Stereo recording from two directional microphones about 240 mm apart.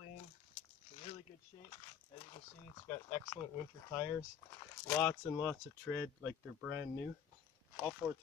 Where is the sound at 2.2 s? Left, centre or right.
Left.